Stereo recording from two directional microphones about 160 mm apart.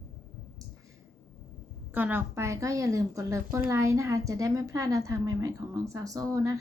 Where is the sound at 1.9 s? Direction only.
10° right (ahead or behind).